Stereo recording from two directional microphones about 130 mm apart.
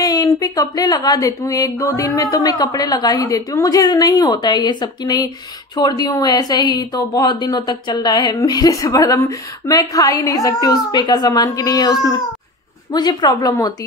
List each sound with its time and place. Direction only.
0.0 s a woman's voice: 30° left (ahead or behind)